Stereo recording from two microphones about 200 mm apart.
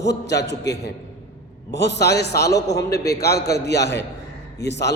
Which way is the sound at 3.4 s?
55° left (ahead or behind).